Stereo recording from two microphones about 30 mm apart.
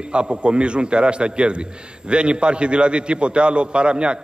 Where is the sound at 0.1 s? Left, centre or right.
Right.